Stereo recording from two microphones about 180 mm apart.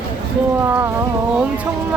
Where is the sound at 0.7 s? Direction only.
15° right (ahead or behind).